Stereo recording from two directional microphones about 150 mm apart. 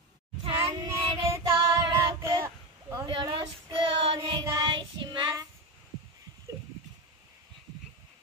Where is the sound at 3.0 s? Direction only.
35° right (ahead or behind).